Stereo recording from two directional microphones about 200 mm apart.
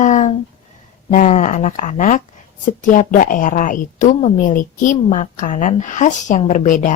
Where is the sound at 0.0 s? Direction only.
35° left (ahead or behind).